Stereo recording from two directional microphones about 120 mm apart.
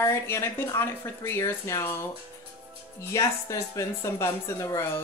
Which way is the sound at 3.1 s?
25° left (ahead or behind).